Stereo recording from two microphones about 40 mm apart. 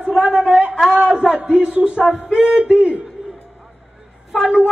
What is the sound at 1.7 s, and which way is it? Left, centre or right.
Speech, right.